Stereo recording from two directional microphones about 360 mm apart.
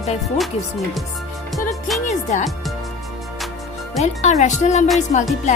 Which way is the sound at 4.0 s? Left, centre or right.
Centre.